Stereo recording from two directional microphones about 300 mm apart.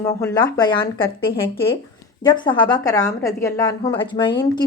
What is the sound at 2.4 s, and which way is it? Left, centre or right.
A woman's voice, centre.